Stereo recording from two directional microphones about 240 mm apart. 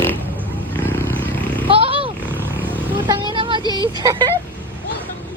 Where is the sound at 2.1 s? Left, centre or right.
Centre.